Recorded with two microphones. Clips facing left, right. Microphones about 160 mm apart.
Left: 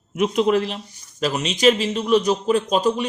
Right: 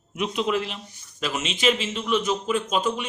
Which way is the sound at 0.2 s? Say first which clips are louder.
Left 7 dB; 45° left (ahead or behind).